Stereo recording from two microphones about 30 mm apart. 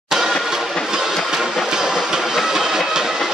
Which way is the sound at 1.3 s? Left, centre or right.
Centre.